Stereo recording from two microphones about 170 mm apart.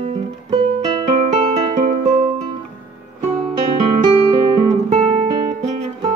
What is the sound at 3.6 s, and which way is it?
Guitar, 30° right (ahead or behind).